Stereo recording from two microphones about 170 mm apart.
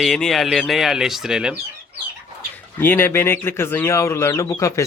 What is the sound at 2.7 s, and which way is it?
Speech, 10° left (ahead or behind).